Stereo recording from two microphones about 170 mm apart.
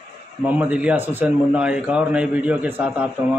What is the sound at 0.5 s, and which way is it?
A man's voice, 10° right (ahead or behind).